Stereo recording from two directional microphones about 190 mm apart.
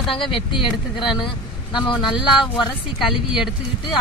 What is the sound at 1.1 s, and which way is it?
Vehicle, 25° left (ahead or behind).